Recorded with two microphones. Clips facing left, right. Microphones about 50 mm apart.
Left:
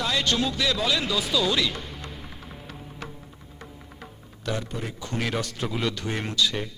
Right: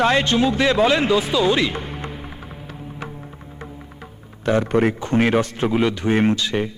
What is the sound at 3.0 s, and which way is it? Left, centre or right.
Music, right.